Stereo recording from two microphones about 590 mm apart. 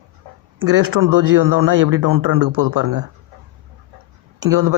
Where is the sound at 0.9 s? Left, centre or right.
Right.